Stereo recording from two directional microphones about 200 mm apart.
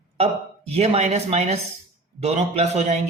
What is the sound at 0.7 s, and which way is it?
Speech, 30° right (ahead or behind).